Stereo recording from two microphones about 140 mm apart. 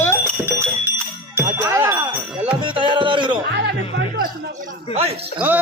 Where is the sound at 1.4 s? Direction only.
20° right (ahead or behind).